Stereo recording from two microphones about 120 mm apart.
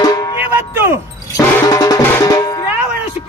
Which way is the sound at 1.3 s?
30° left (ahead or behind).